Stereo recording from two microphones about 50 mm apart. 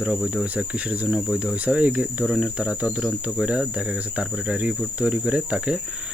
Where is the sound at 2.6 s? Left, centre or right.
Right.